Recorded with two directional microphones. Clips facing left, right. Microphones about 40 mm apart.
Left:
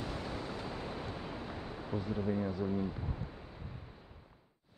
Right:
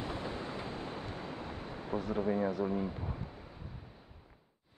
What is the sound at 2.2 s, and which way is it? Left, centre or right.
Speech, right.